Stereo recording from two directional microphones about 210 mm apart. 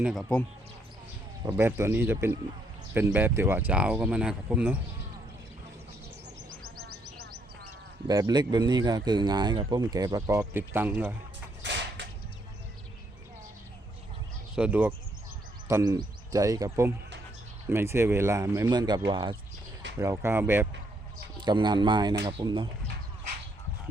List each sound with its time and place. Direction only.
0.0 s speech: centre (ahead or behind)
1.5 s speech: 10° right (ahead or behind)
8.0 s speech: 20° right (ahead or behind)
11.6 s creak: 55° right (ahead or behind)
14.5 s speech: 5° right (ahead or behind); by 19.4 s 25° right (ahead or behind)
20.0 s speech: 15° right (ahead or behind)
21.3 s speech: 20° right (ahead or behind)